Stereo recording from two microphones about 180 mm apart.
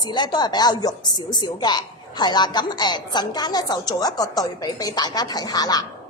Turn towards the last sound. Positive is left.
turn(degrees=20)  # may be behind; listen again after turning